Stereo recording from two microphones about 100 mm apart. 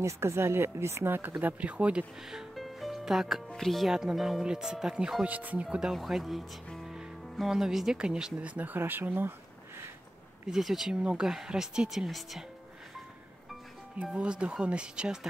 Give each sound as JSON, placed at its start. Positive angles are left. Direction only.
{"t": 0.0, "sound": "speech", "side_deg": -30}
{"t": 10.4, "sound": "speech", "side_deg": -5}
{"t": 14.0, "sound": "speech", "side_deg": -10}